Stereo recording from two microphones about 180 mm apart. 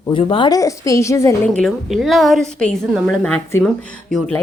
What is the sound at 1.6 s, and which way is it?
A woman's voice, centre (ahead or behind).